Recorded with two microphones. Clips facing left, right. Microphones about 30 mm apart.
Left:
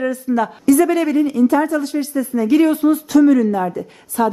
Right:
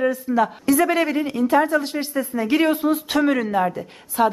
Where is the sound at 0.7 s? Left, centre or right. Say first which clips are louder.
Left 7 dB; centre.